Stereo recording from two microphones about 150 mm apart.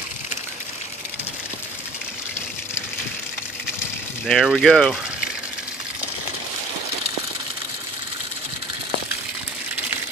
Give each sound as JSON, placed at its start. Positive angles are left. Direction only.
{"t": 4.3, "sound": "speech", "side_deg": 0}